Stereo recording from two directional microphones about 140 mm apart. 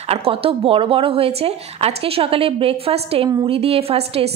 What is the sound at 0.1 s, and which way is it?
A woman's voice, 45° right (ahead or behind).